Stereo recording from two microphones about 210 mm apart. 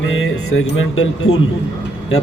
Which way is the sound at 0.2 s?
75° left (ahead or behind).